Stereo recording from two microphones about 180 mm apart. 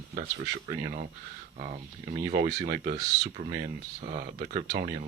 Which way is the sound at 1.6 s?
40° right (ahead or behind).